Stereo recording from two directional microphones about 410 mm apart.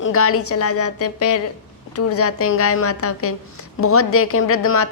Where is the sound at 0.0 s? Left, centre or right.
Left.